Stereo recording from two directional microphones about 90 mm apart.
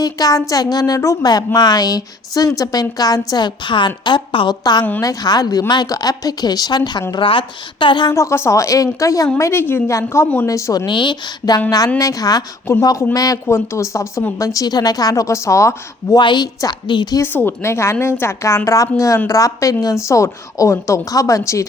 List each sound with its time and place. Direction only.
0.0 s speech: 45° left (ahead or behind)
1.2 s a woman's voice: 45° left (ahead or behind); by 4.5 s 65° left (ahead or behind)
4.6 s speech: 50° left (ahead or behind)
7.2 s a woman's voice: 70° left (ahead or behind)
8.1 s a woman's voice: 35° left (ahead or behind)
9.4 s a woman's voice: 25° left (ahead or behind)
10.8 s a woman's voice: 60° left (ahead or behind)
11.9 s a woman's voice: 40° left (ahead or behind)
16.1 s a woman's voice: 55° left (ahead or behind)
17.2 s a woman's voice: 25° left (ahead or behind)